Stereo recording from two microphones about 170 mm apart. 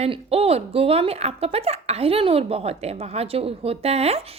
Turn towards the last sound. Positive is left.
turn(degrees=-35)  # may be behind; listen again after turning